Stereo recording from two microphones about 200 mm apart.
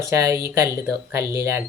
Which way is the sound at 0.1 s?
15° right (ahead or behind).